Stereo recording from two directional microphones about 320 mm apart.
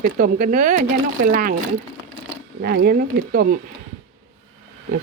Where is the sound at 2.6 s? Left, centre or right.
Right.